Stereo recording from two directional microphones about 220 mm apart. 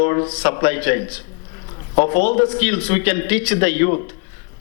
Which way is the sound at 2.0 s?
25° left (ahead or behind).